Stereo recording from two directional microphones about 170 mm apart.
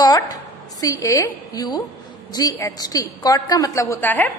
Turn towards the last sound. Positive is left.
turn(degrees=10)  # may be behind; listen again after turning